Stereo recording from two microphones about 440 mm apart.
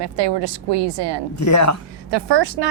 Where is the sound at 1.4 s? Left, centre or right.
Left.